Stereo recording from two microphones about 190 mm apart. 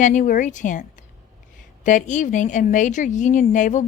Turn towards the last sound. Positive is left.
turn(degrees=40)  # may be behind; listen again after turning